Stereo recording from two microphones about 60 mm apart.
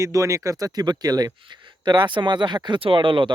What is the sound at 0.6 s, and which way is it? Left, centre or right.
Speech, right.